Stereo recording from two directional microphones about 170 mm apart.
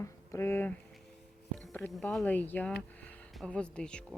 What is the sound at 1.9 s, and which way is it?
Speech, centre (ahead or behind).